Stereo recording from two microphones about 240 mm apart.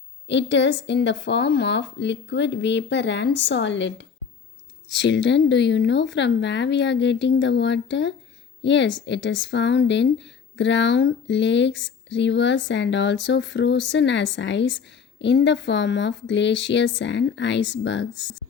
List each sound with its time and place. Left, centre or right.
0.3 s speech: left